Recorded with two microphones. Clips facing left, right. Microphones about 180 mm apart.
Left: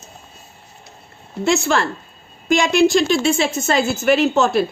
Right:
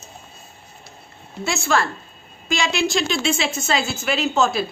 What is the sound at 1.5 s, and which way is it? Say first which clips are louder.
Speech: left 2 dB; 60° left (ahead or behind).